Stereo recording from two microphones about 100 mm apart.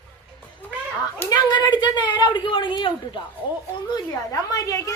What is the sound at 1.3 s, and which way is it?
A woman's voice, 45° left (ahead or behind).